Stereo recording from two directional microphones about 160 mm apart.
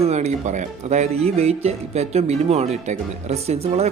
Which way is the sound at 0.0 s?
45° right (ahead or behind).